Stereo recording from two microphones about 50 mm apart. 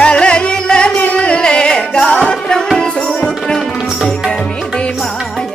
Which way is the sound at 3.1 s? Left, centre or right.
Centre.